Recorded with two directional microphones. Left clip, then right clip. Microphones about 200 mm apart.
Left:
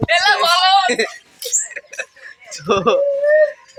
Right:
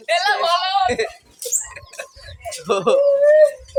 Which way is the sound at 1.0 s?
35° left (ahead or behind).